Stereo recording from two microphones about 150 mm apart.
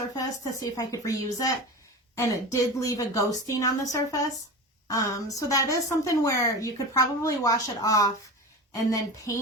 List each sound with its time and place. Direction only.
0.2 s a woman's voice: 20° left (ahead or behind)